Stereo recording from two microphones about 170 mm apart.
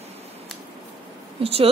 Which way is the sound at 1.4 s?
35° right (ahead or behind).